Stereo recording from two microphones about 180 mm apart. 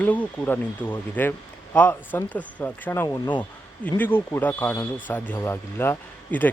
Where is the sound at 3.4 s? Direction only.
10° left (ahead or behind).